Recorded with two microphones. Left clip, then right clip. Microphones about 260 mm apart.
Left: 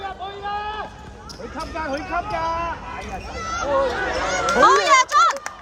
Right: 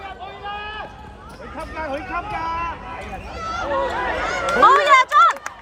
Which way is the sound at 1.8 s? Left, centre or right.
Left.